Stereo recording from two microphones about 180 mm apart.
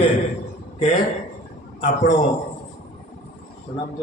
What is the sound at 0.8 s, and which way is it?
Speech, 40° left (ahead or behind).